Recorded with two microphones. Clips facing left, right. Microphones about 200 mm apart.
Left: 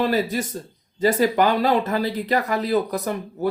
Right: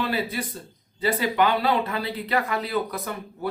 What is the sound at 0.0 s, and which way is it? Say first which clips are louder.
Speech: left 6 dB; 45° left (ahead or behind).